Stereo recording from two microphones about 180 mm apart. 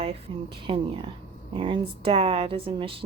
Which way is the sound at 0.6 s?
25° right (ahead or behind).